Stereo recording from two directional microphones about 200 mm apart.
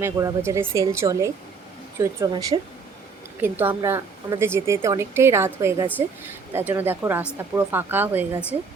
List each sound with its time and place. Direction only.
0.0 s a woman's voice: 15° right (ahead or behind)